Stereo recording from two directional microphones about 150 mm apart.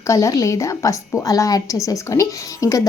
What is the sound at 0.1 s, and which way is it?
A woman's voice, 20° left (ahead or behind).